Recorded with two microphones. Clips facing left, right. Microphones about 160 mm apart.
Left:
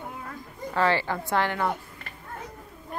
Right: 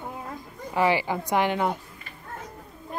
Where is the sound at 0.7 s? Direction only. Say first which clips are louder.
Right 1 dB; 15° right (ahead or behind).